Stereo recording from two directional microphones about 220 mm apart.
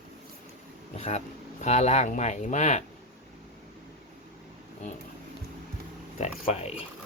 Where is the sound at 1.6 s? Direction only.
30° left (ahead or behind).